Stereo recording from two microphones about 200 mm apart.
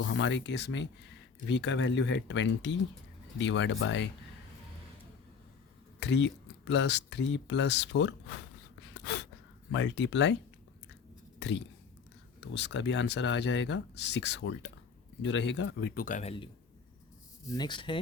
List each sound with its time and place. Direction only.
0.0 s speech: 65° left (ahead or behind)
6.0 s speech: 60° left (ahead or behind)
8.9 s gasp: 60° left (ahead or behind)
9.7 s speech: 65° left (ahead or behind)
11.3 s a sound: 65° left (ahead or behind)
12.5 s speech: 65° left (ahead or behind); by 16.3 s 40° left (ahead or behind)
17.5 s speech: 20° left (ahead or behind)